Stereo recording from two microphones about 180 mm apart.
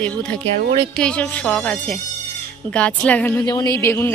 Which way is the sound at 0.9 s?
5° left (ahead or behind).